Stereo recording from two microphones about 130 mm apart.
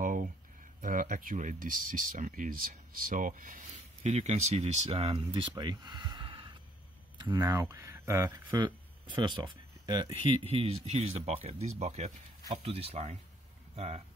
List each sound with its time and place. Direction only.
0.0 s a sound: 90° right
0.7 s speech: 90° right; by 8.5 s 25° right (ahead or behind)
8.5 s speech: 35° right (ahead or behind)
10.3 s speech: 50° right (ahead or behind)